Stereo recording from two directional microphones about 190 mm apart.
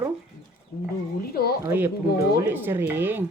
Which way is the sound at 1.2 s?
55° left (ahead or behind).